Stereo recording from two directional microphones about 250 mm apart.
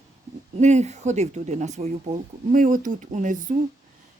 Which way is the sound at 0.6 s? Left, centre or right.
Right.